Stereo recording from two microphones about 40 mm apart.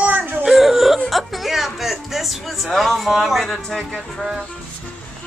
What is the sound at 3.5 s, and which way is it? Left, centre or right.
Speech, centre.